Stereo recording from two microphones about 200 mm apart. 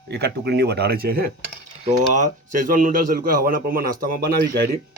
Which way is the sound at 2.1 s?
40° right (ahead or behind).